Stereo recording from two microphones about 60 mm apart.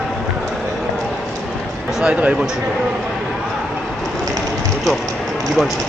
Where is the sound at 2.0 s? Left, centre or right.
Right.